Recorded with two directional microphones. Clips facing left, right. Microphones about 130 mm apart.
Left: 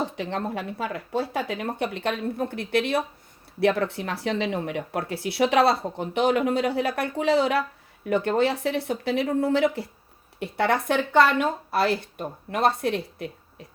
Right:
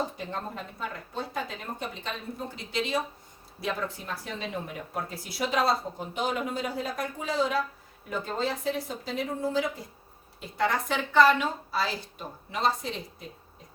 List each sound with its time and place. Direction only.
0.2 s speech: 85° left; by 13.7 s 70° left (ahead or behind)